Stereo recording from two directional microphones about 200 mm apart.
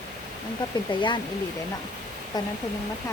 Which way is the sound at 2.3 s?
20° left (ahead or behind).